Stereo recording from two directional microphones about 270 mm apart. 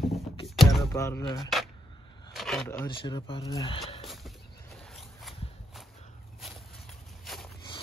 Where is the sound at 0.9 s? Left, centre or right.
Centre.